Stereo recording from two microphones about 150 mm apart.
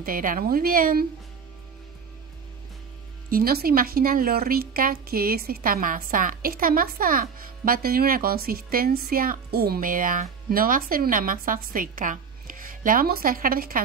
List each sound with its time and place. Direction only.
0.0 s speech: 70° right (ahead or behind)
3.3 s speech: 80° right